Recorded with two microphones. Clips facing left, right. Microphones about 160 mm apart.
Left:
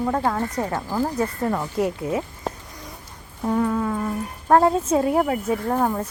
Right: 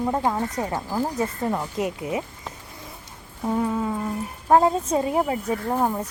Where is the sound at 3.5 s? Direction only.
10° right (ahead or behind).